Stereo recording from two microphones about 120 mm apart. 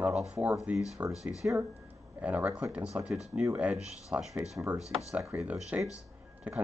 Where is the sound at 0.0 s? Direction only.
5° right (ahead or behind).